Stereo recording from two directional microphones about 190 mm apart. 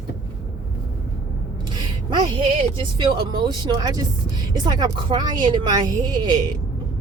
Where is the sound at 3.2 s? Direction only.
20° right (ahead or behind).